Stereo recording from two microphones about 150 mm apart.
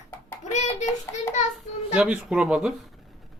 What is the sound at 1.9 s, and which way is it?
Speech, 5° right (ahead or behind).